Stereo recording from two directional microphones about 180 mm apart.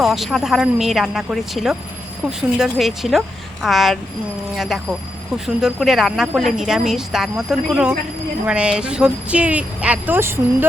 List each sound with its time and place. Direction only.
0.0 s speech: centre (ahead or behind)